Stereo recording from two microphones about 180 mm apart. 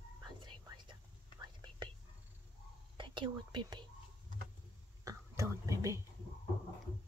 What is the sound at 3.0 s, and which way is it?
Speech, 25° right (ahead or behind).